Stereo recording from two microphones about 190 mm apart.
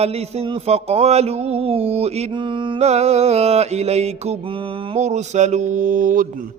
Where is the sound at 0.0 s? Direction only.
35° right (ahead or behind).